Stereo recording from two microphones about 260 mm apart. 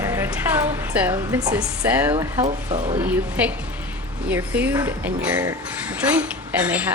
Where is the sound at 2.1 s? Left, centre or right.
Centre.